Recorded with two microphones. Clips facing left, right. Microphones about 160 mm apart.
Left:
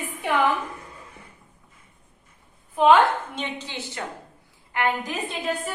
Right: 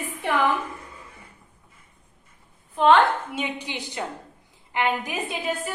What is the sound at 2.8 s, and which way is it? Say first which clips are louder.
Speech: left 1 dB; 5° left (ahead or behind).